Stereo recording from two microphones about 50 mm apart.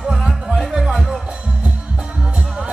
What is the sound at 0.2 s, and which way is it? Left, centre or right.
Music, centre.